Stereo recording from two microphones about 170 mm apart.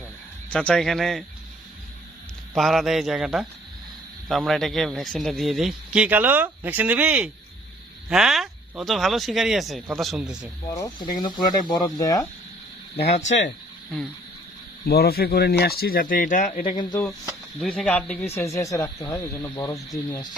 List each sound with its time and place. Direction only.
0.5 s speech: 5° left (ahead or behind)
2.6 s speech: centre (ahead or behind)
10.7 s speech: 20° left (ahead or behind)
13.1 s speech: 40° left (ahead or behind)
14.8 s speech: 65° left (ahead or behind); by 16.6 s 50° left (ahead or behind)
16.6 s speech: 25° left (ahead or behind)
17.0 s speech: 5° left (ahead or behind); by 19.8 s 20° left (ahead or behind)